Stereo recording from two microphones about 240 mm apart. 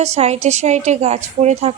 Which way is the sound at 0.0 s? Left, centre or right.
Right.